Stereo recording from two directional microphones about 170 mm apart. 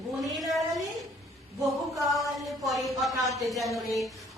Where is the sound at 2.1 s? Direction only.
Centre (ahead or behind).